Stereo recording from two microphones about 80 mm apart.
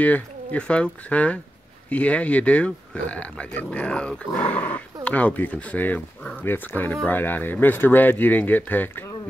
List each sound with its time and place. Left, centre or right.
0.0 s speech: centre